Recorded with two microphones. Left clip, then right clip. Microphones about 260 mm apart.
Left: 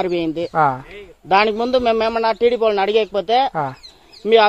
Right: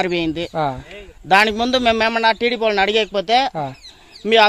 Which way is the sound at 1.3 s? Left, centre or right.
Right.